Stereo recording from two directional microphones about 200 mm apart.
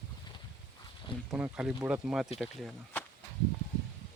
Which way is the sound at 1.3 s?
5° right (ahead or behind).